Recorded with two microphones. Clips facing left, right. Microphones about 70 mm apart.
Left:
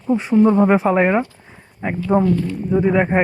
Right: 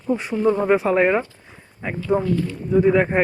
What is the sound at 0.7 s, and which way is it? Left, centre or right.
Speech, left.